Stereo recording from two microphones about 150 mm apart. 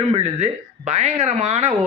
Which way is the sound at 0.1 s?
45° right (ahead or behind).